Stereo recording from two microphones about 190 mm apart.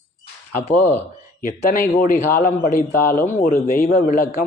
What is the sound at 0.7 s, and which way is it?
Speech, 10° left (ahead or behind).